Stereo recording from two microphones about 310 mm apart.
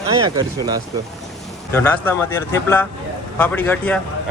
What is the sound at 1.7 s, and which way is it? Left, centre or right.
A man's voice, centre.